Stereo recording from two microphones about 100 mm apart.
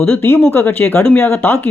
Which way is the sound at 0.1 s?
25° left (ahead or behind).